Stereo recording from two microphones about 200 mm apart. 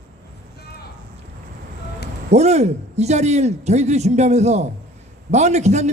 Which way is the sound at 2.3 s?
35° right (ahead or behind).